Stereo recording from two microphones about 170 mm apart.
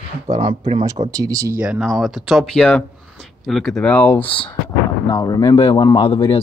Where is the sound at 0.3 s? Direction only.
35° right (ahead or behind).